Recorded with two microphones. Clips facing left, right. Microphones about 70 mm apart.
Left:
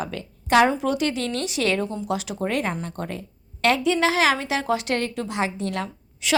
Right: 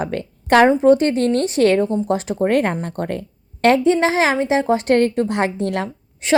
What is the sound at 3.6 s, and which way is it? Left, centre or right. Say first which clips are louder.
A woman's voice: right 6 dB; right.